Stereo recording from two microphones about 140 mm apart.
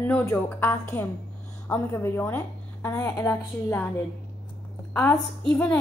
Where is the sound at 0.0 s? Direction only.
15° left (ahead or behind).